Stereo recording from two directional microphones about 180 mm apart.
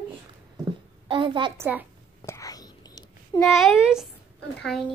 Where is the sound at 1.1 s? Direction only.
30° right (ahead or behind).